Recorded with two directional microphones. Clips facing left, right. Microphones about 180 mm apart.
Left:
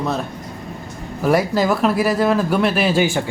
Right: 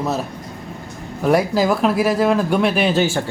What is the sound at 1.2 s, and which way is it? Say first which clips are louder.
A man's voice: right 1 dB; centre (ahead or behind).